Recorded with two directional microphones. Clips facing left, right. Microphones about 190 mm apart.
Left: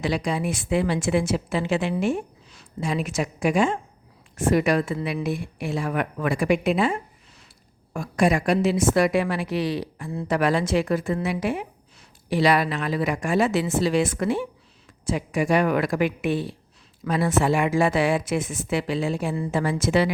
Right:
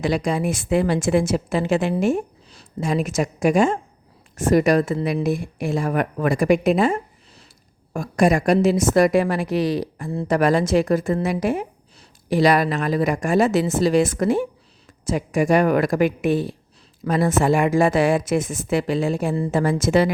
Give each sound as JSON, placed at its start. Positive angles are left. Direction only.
{"t": 0.0, "sound": "a woman's voice", "side_deg": -45}